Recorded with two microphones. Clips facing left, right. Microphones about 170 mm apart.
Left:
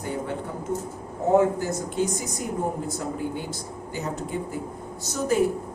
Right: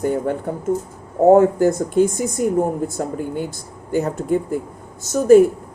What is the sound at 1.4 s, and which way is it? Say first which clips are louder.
Speech: right 8 dB; 50° right (ahead or behind).